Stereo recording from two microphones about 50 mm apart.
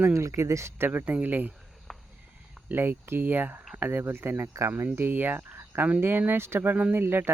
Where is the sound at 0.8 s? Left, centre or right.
Right.